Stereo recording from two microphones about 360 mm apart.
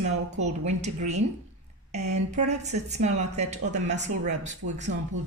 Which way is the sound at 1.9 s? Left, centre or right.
Centre.